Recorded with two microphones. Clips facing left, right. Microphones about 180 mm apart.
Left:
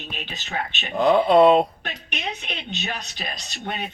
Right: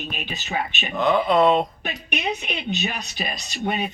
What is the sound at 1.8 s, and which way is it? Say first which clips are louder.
Speech: right 5 dB; 10° right (ahead or behind).